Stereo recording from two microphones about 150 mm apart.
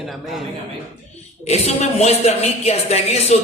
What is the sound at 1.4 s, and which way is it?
A man's voice, 45° left (ahead or behind).